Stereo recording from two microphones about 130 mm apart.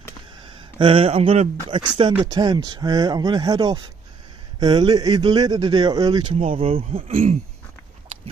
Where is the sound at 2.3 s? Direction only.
30° right (ahead or behind).